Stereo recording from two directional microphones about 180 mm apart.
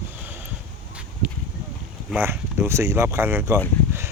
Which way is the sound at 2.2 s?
15° right (ahead or behind).